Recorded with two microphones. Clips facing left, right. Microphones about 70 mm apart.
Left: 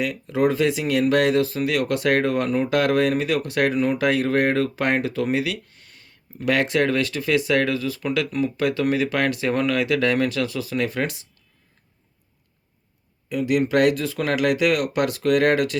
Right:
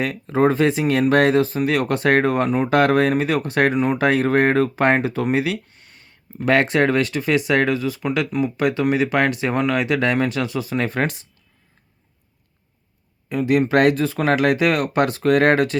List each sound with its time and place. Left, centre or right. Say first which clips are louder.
0.0 s speech: right 3 dB; right
13.2 s speech: right 3 dB; right